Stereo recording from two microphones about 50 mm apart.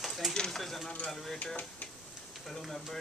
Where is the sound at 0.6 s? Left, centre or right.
Centre.